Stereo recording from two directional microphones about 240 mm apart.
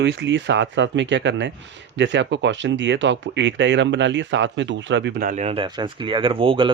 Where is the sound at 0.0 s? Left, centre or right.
Right.